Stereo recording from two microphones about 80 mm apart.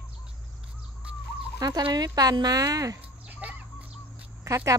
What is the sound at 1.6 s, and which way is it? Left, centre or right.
A woman's voice, right.